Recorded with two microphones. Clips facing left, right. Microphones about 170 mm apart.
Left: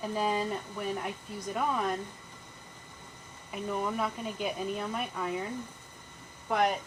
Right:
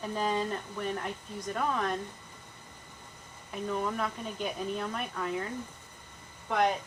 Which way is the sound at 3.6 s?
5° left (ahead or behind).